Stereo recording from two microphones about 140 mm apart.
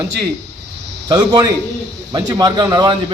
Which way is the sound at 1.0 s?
25° right (ahead or behind).